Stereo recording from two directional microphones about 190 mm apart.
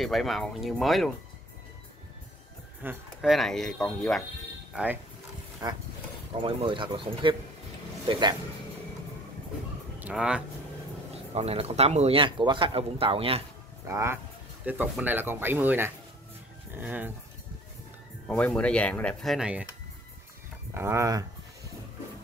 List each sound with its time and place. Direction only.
0.0 s speech: centre (ahead or behind)
2.8 s speech: 10° right (ahead or behind)
3.2 s speech: centre (ahead or behind)
5.6 s speech: 20° right (ahead or behind)
9.9 s speech: 5° right (ahead or behind)
11.3 s speech: 35° right (ahead or behind)
13.8 s speech: 15° right (ahead or behind)
18.2 s speech: 5° left (ahead or behind)
20.7 s speech: 15° right (ahead or behind)